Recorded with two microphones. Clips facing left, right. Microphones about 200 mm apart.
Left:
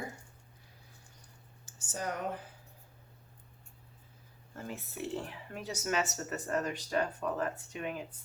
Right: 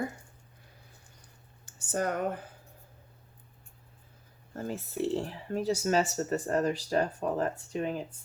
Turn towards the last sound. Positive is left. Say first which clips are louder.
# right 6 dB
turn(degrees=-35)  # may be behind; listen again after turning